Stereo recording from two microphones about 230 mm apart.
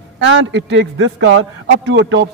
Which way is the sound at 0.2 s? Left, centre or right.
Right.